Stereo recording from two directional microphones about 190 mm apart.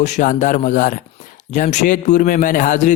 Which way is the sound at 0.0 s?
40° left (ahead or behind).